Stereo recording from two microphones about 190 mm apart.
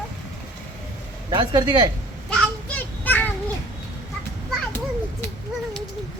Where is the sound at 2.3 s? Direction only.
5° left (ahead or behind).